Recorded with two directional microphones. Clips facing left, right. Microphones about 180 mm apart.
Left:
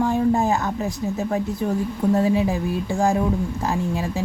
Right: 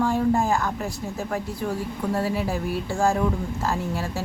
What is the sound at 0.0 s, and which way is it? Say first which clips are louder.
A woman's voice: left 2 dB; 20° left (ahead or behind).